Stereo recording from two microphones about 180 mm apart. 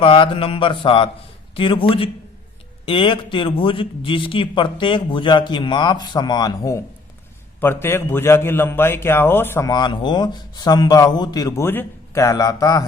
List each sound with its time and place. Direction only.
0.0 s a man's voice: 30° left (ahead or behind)